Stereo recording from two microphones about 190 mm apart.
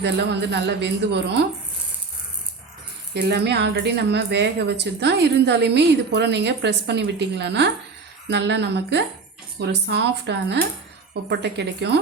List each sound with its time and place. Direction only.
0.0 s speech: 65° right (ahead or behind)
3.2 s speech: 60° right (ahead or behind)